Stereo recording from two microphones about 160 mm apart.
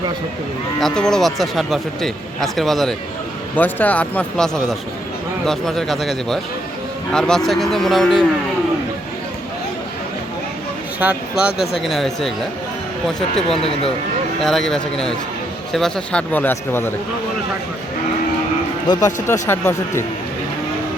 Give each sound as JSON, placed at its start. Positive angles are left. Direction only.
{"t": 0.8, "sound": "speech", "side_deg": 5}
{"t": 11.0, "sound": "speech", "side_deg": -10}
{"t": 13.6, "sound": "speech", "side_deg": 35}
{"t": 14.4, "sound": "speech", "side_deg": 0}
{"t": 18.9, "sound": "speech", "side_deg": 25}